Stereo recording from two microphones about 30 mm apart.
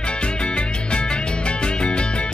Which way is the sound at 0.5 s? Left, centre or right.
Left.